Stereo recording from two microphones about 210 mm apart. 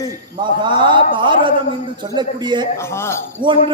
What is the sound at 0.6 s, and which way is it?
A man's voice, 20° right (ahead or behind).